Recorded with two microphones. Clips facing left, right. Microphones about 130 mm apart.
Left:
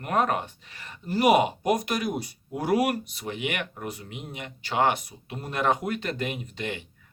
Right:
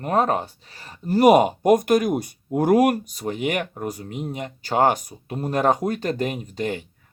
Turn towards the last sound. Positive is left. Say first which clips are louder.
# right 7 dB
turn(degrees=-40)  # may be behind; listen again after turning